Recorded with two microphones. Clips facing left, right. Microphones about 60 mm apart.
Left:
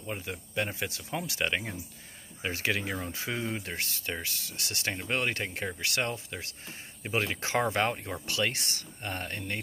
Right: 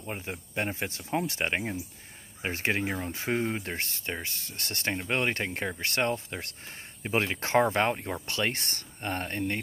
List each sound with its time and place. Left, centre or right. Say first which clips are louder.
0.0 s speech: even; right
7.7 s speech: right 2 dB; right